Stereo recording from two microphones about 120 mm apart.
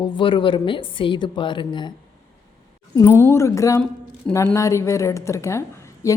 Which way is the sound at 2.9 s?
25° left (ahead or behind).